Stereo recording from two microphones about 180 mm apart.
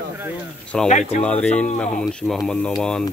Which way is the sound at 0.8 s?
40° left (ahead or behind).